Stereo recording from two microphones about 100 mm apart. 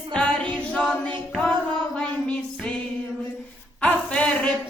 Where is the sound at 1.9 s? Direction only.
10° left (ahead or behind).